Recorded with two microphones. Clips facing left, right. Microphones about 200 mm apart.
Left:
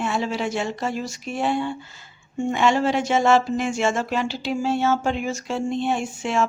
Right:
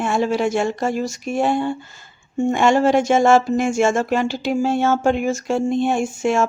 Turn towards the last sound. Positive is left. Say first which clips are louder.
# right 5 dB
turn(degrees=-45)  # may be behind; listen again after turning